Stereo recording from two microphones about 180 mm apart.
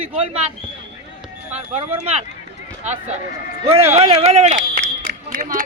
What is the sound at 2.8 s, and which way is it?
Speech, 40° right (ahead or behind).